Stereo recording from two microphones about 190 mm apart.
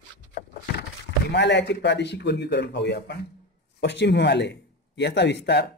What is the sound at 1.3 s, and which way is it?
Speech, 65° left (ahead or behind).